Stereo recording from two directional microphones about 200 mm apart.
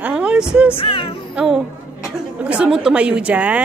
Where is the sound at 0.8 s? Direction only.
25° left (ahead or behind).